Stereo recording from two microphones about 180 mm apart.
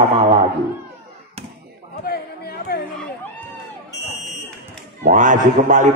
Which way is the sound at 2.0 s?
60° left (ahead or behind).